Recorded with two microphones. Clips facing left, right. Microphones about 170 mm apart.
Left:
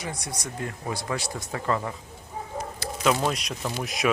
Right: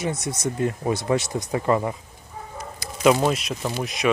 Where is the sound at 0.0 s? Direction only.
25° right (ahead or behind).